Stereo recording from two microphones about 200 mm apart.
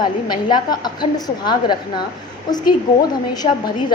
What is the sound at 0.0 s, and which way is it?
A woman's voice, 20° left (ahead or behind).